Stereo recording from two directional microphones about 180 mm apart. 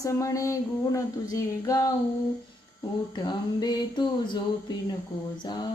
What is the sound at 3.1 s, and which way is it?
Speech, 25° left (ahead or behind).